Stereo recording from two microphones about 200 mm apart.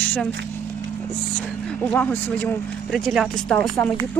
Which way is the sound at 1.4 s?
5° left (ahead or behind).